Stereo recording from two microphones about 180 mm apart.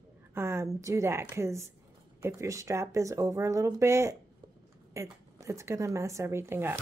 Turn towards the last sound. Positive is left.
turn(degrees=-15)  # may be behind; listen again after turning